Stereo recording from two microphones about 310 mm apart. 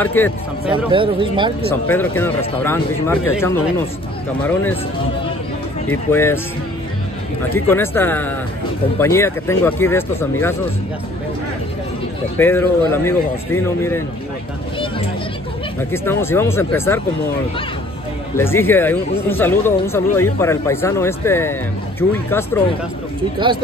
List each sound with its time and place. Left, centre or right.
0.0 s speech: centre
0.9 s speech: centre
1.7 s speech: centre
5.9 s speech: centre
7.5 s speech: centre
12.4 s speech: centre
15.9 s speech: centre
18.3 s speech: centre